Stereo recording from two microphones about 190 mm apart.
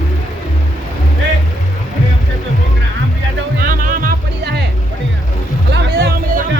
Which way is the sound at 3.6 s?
45° right (ahead or behind).